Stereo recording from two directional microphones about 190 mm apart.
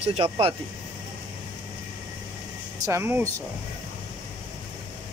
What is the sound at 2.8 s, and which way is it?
Speech, 15° right (ahead or behind).